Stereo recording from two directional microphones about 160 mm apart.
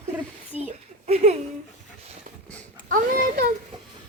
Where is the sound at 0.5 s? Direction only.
10° right (ahead or behind).